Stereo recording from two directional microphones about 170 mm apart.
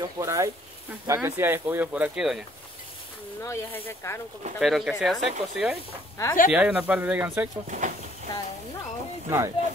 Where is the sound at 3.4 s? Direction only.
15° left (ahead or behind).